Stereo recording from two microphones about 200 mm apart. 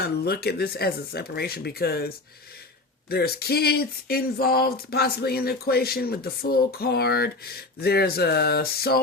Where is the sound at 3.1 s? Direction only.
50° left (ahead or behind).